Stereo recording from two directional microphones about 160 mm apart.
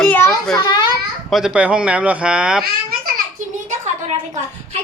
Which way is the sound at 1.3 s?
5° right (ahead or behind).